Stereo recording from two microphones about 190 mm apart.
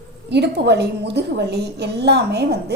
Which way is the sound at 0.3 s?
60° right (ahead or behind).